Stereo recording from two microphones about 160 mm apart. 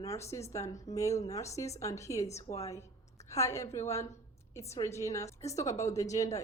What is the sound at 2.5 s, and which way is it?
Speech, 50° left (ahead or behind).